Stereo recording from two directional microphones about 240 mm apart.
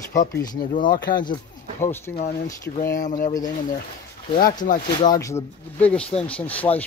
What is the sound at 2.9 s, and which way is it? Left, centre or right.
Speech, left.